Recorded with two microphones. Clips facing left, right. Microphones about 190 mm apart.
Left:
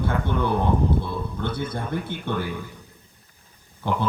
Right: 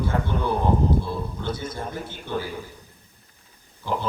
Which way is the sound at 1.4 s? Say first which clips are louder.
Left 2 dB; 60° left (ahead or behind).